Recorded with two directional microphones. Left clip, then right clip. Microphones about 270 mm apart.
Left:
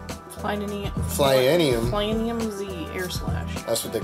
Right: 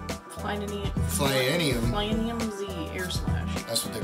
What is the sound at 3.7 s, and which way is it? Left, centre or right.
Speech, centre.